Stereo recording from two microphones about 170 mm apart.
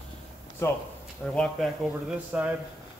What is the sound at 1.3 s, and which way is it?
A man's voice, centre (ahead or behind).